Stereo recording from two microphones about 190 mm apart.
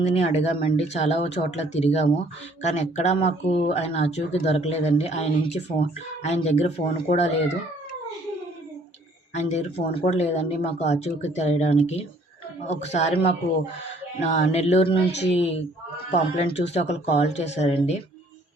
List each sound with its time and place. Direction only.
0.0 s speech: 35° left (ahead or behind)
9.3 s speech: 35° left (ahead or behind)
14.2 s speech: 35° left (ahead or behind)